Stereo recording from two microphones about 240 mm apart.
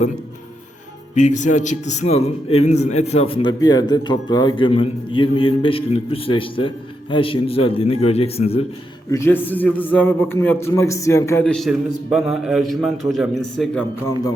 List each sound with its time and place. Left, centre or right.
1.1 s a man's voice: left
9.0 s a man's voice: centre